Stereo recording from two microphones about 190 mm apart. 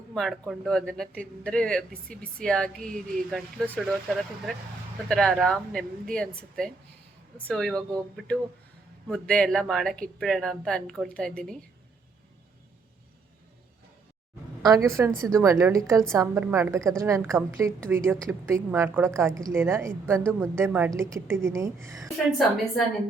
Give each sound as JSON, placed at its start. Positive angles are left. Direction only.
{"t": 0.1, "sound": "speech", "side_deg": 0}
{"t": 5.0, "sound": "speech", "side_deg": 5}
{"t": 9.0, "sound": "speech", "side_deg": 5}
{"t": 14.6, "sound": "a woman's voice", "side_deg": -15}
{"t": 22.0, "sound": "speech", "side_deg": 0}